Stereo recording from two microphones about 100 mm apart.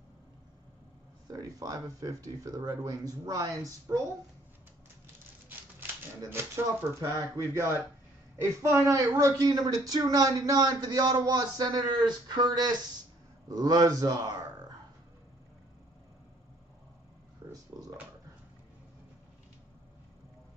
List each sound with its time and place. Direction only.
1.2 s speech: 35° right (ahead or behind)
6.3 s speech: 25° right (ahead or behind)
7.0 s speech: 35° right (ahead or behind)
17.5 s a sound: 35° right (ahead or behind)